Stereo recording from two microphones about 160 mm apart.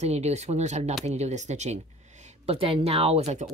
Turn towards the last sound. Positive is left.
turn(degrees=-45)  # may be behind; listen again after turning